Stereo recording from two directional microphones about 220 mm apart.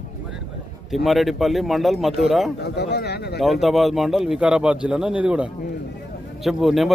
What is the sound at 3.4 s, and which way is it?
Speech, centre (ahead or behind).